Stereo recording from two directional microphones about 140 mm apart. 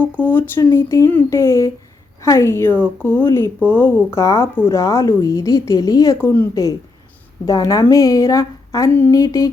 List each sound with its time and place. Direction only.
0.0 s speech: 15° left (ahead or behind)